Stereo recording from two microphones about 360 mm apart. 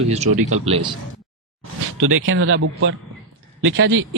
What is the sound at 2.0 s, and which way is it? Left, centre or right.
Speech, right.